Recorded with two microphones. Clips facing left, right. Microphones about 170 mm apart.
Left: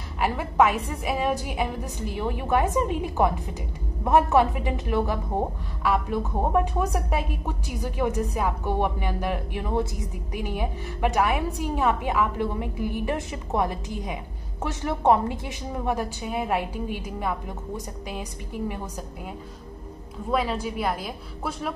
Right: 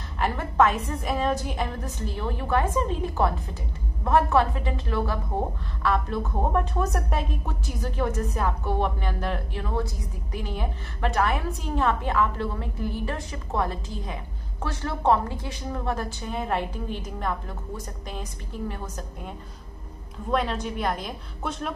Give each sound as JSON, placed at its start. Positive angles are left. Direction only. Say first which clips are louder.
{"t": 0.2, "sound": "a woman's voice", "louder": "left 1 dB", "side_deg": 10}
{"t": 20.2, "sound": "a woman's voice", "louder": "even", "side_deg": 5}